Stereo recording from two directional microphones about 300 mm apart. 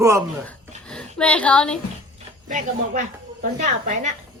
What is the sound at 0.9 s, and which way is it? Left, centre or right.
Speech, centre.